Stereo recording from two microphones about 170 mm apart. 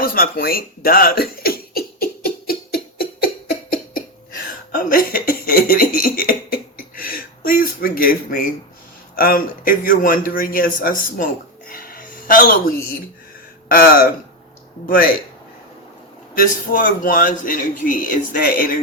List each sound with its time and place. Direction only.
0.0 s speech: 60° left (ahead or behind)
2.5 s a sound: 65° left (ahead or behind)
3.7 s cough: 55° left (ahead or behind)
9.1 s a man's voice: 60° left (ahead or behind)
11.7 s a sound: 55° left (ahead or behind)
13.7 s a man's voice: 60° left (ahead or behind)
16.3 s a man's voice: 55° left (ahead or behind)